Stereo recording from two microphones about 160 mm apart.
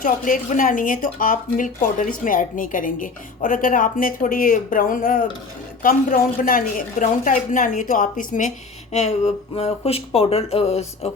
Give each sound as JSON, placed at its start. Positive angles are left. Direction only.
{"t": 0.0, "sound": "a woman's voice", "side_deg": 55}